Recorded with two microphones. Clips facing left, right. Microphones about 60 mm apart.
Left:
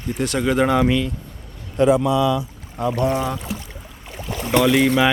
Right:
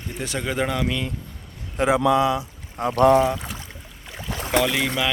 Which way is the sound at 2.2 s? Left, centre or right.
Right.